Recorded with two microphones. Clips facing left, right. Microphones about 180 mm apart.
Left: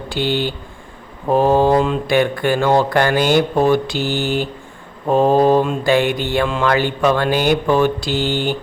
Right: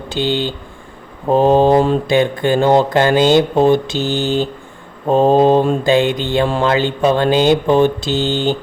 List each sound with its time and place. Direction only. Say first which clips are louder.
0.1 s speech: right 1 dB; 20° right (ahead or behind)
6.4 s speech: right 3 dB; 35° right (ahead or behind)
6.7 s speech: right 2 dB; 20° right (ahead or behind)